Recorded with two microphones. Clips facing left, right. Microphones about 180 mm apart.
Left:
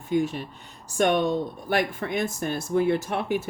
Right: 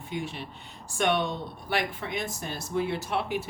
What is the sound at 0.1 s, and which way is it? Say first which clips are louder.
Speech: left 10 dB; 45° left (ahead or behind).